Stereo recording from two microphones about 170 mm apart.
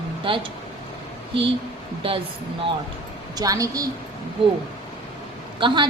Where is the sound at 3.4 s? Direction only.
20° right (ahead or behind).